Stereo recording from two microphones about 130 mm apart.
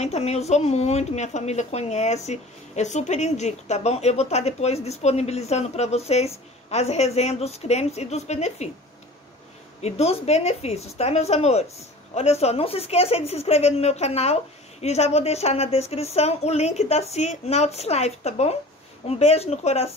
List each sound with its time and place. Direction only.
0.0 s a woman's voice: 55° left (ahead or behind)
9.8 s a woman's voice: 55° left (ahead or behind)